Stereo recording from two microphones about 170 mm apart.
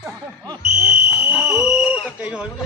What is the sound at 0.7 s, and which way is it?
Chop, 45° right (ahead or behind).